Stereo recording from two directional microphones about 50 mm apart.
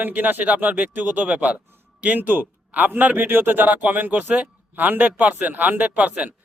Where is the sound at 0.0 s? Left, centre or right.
Right.